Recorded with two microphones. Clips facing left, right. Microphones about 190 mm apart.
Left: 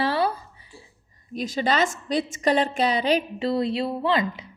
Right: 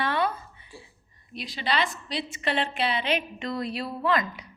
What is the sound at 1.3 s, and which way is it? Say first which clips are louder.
A woman's voice: left 6 dB; 45° left (ahead or behind).